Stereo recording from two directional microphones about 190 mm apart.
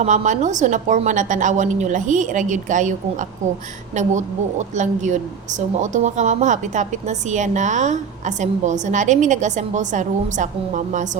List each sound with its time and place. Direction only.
0.0 s a woman's voice: 40° right (ahead or behind)